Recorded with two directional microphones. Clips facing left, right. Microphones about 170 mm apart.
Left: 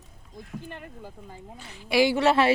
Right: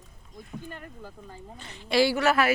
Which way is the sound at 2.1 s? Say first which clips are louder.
Left 3 dB; 30° left (ahead or behind).